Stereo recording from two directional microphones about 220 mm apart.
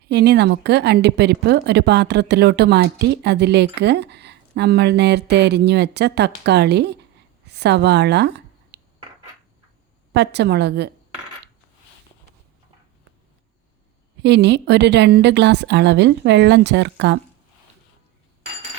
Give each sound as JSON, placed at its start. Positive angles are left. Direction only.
{"t": 0.1, "sound": "speech", "side_deg": -50}
{"t": 7.4, "sound": "a sound", "side_deg": -50}
{"t": 10.1, "sound": "speech", "side_deg": -50}
{"t": 14.2, "sound": "speech", "side_deg": -50}